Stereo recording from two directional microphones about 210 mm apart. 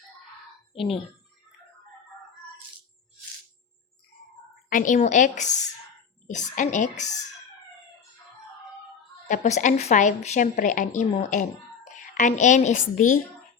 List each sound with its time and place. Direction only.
4.7 s a woman's voice: 40° left (ahead or behind)
9.3 s a woman's voice: 40° left (ahead or behind)